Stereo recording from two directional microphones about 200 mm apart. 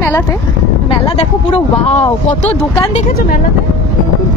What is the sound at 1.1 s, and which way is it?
Speech, 30° left (ahead or behind).